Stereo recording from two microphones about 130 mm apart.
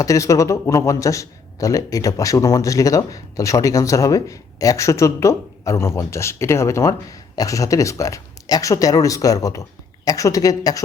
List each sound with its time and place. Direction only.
0.0 s a man's voice: 25° left (ahead or behind)